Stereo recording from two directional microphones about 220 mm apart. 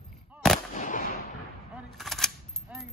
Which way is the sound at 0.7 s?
35° left (ahead or behind).